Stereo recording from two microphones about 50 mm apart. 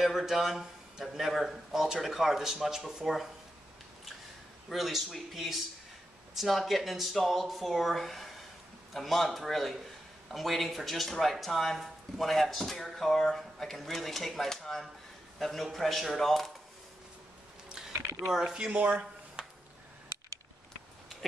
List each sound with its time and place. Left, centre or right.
0.0 s speech: centre
4.6 s a man's voice: centre
17.6 s mechanisms: centre
18.3 s speech: centre
18.8 s a sound: right